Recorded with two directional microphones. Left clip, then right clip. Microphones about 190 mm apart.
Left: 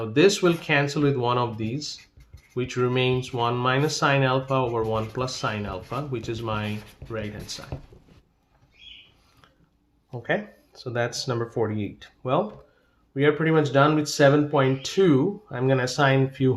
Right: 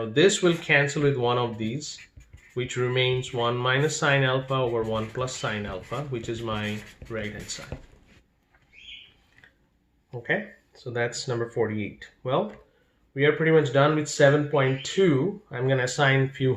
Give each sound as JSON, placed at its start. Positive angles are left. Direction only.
{"t": 0.1, "sound": "speech", "side_deg": 30}
{"t": 10.1, "sound": "speech", "side_deg": 35}